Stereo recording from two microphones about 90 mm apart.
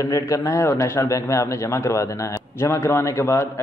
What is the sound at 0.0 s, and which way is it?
Speech, 35° left (ahead or behind).